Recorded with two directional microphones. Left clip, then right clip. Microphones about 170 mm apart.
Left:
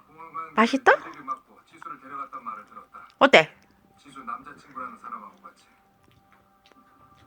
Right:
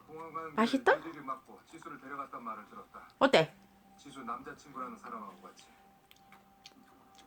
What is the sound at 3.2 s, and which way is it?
Speech, 30° left (ahead or behind).